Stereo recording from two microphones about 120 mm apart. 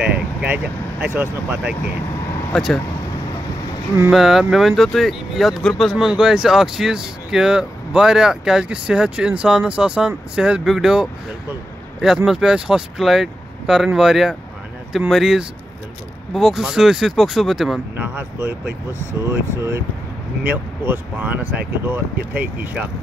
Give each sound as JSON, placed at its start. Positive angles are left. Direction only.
{"t": 1.0, "sound": "speech", "side_deg": -20}
{"t": 2.5, "sound": "speech", "side_deg": 0}
{"t": 4.1, "sound": "speech", "side_deg": -5}
{"t": 12.3, "sound": "speech", "side_deg": -5}
{"t": 17.9, "sound": "speech", "side_deg": -20}